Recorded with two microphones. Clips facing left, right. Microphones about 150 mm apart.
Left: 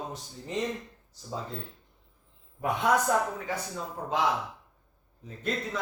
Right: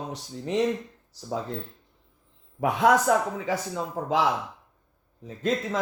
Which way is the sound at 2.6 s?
90° right.